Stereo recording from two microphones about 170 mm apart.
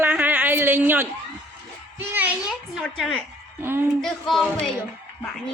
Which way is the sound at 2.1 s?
10° right (ahead or behind).